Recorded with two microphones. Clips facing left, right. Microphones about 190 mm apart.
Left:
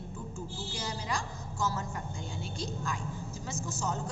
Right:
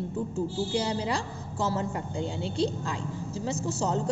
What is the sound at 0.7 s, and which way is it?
A woman's voice, 30° right (ahead or behind).